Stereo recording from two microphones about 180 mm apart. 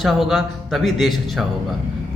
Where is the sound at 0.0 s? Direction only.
Centre (ahead or behind).